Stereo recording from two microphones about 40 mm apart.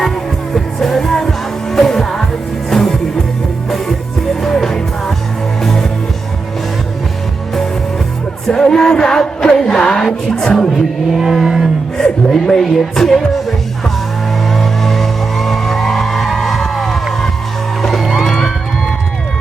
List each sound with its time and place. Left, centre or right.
0.5 s music: centre
4.4 s music: centre
8.4 s music: centre
9.6 s chant: left
10.0 s music: centre
11.1 s vehicle: centre
12.0 s music: centre
14.5 s music: centre